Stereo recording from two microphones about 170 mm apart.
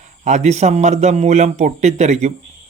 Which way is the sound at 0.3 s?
40° right (ahead or behind).